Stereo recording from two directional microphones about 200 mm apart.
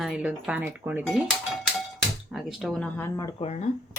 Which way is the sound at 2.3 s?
Centre (ahead or behind).